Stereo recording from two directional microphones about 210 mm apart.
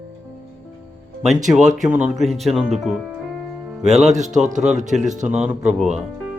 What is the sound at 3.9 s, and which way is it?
Speech, 30° right (ahead or behind).